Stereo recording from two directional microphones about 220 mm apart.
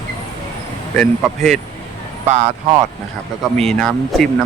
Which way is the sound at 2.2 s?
30° right (ahead or behind).